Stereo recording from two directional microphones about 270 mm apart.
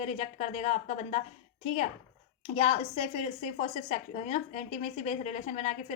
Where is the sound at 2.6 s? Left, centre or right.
Left.